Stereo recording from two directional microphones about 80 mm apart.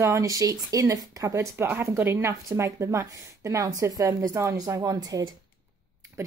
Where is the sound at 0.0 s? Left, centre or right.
Right.